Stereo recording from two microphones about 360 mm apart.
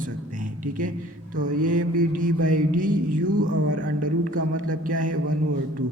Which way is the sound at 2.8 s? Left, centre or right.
Right.